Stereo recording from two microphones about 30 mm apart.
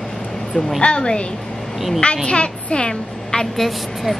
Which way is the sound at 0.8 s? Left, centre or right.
Left.